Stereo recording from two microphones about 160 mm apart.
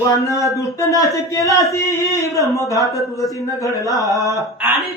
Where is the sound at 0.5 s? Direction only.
20° left (ahead or behind).